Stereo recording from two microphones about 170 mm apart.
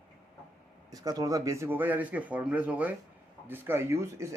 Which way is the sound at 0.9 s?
20° right (ahead or behind).